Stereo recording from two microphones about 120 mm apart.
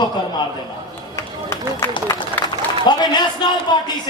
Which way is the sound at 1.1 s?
25° left (ahead or behind).